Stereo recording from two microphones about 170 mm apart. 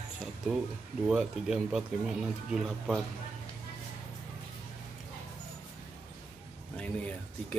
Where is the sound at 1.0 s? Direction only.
5° right (ahead or behind).